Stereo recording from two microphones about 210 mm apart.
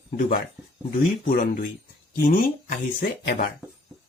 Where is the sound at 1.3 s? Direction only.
40° left (ahead or behind).